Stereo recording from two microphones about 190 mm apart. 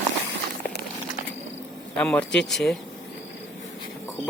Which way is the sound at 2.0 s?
5° left (ahead or behind).